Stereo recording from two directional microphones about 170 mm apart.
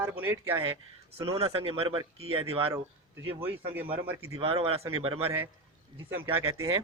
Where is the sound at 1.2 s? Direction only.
35° right (ahead or behind).